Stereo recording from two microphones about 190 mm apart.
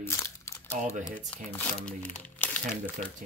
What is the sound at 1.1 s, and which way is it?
Speech, 10° left (ahead or behind).